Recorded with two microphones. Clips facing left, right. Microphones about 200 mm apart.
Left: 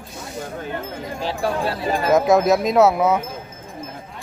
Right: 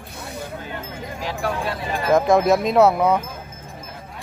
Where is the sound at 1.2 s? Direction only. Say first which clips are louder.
Left 3 dB; 30° left (ahead or behind).